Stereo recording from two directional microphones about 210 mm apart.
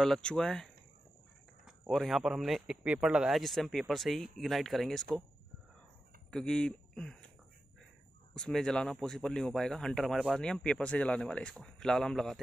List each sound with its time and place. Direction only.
0.0 s speech: 5° left (ahead or behind)
1.9 s speech: centre (ahead or behind)
6.3 s speech: 5° left (ahead or behind)
8.4 s speech: centre (ahead or behind)